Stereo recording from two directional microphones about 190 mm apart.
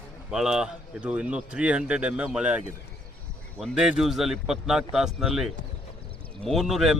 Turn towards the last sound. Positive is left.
turn(degrees=0)  # may be behind; listen again after turning